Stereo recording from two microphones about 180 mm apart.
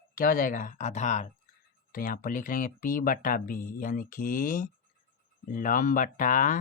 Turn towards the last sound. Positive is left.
turn(degrees=45)  # may be behind; listen again after turning